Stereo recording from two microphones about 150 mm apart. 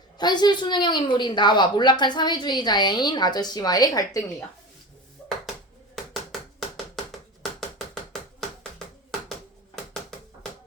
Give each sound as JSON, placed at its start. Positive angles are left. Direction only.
{"t": 0.2, "sound": "a woman's voice", "side_deg": 30}